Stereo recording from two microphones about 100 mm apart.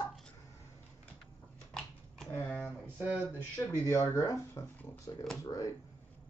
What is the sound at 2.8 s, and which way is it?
Speech, 20° right (ahead or behind).